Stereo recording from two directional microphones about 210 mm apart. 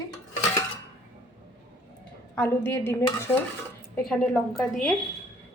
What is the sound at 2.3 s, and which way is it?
A woman's voice, 10° left (ahead or behind).